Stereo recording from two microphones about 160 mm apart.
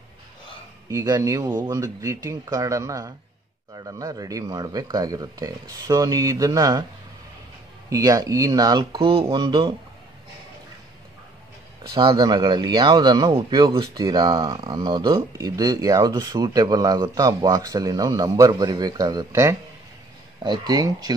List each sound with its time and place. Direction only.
0.8 s speech: 25° right (ahead or behind)
7.9 s speech: 20° right (ahead or behind)
11.9 s speech: 30° right (ahead or behind)